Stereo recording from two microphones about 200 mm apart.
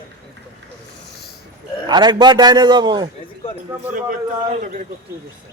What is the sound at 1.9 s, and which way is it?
A man's voice, 20° right (ahead or behind).